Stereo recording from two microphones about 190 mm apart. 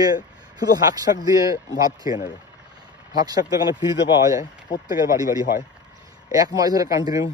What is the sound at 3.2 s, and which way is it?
Speech, 20° right (ahead or behind).